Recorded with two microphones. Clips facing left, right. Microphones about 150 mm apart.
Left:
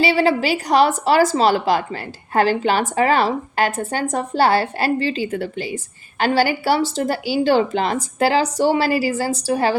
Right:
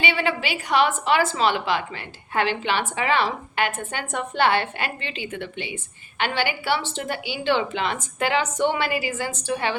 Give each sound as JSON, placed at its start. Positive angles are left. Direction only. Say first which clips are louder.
{"t": 0.0, "sound": "a woman's voice", "louder": "left 8 dB", "side_deg": 35}